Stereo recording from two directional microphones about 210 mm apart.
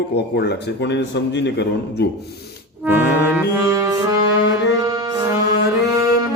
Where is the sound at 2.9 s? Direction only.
10° right (ahead or behind).